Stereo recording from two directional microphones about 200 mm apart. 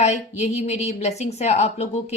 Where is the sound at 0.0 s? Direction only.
35° left (ahead or behind).